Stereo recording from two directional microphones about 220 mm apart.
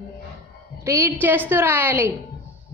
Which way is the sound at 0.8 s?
15° right (ahead or behind).